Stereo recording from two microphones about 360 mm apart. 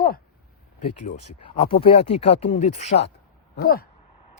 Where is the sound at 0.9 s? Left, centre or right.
Left.